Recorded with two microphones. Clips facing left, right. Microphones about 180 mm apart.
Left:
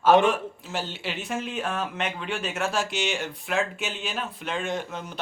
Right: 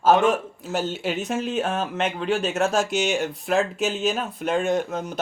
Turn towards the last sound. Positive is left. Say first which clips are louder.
# right 7 dB
turn(degrees=-45)  # may be behind; listen again after turning